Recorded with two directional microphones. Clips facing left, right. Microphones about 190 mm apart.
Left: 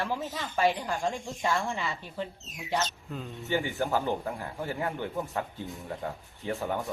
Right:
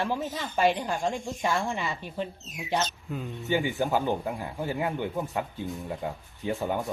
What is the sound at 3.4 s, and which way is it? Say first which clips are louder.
Speech: right 3 dB; 15° right (ahead or behind).